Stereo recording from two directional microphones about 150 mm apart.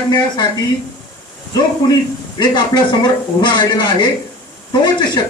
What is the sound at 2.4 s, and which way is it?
Speech, 30° left (ahead or behind).